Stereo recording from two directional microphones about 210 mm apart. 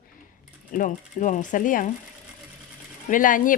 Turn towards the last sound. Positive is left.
turn(degrees=40)  # may be behind; listen again after turning